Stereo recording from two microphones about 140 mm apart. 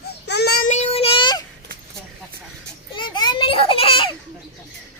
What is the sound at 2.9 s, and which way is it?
Children playing, 35° left (ahead or behind).